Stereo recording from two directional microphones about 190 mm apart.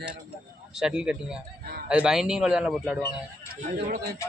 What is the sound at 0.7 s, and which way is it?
Speech, 5° right (ahead or behind).